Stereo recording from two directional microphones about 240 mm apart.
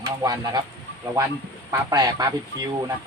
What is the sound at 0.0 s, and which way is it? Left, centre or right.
Speech, centre.